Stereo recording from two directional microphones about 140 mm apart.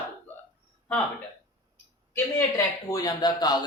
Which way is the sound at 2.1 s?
25° left (ahead or behind).